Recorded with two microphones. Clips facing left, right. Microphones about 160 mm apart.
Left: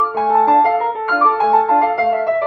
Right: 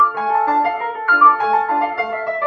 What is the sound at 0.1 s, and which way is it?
Music, 25° left (ahead or behind).